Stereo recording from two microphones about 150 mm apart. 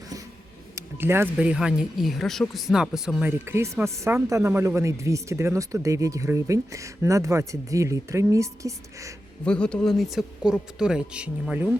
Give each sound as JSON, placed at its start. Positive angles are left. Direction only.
{"t": 0.8, "sound": "speech", "side_deg": -15}
{"t": 9.4, "sound": "speech", "side_deg": 5}